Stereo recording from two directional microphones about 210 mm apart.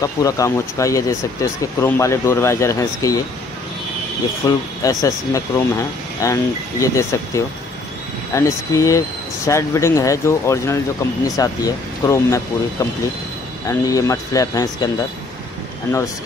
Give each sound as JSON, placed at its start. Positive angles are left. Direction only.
{"t": 0.0, "sound": "speech", "side_deg": 15}
{"t": 4.5, "sound": "speech", "side_deg": 15}